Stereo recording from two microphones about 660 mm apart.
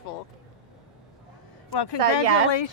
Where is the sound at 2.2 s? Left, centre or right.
Right.